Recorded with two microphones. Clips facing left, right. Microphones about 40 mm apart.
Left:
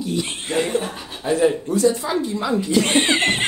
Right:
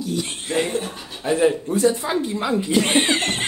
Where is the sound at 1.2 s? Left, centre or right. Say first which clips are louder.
Even; right.